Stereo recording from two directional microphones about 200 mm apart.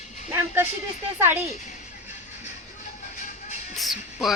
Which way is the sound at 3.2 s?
40° left (ahead or behind).